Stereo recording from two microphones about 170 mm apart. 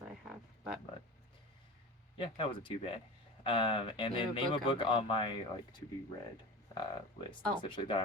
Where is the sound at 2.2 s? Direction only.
30° left (ahead or behind).